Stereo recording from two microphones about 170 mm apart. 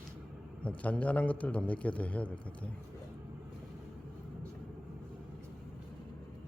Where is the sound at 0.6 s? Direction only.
10° left (ahead or behind).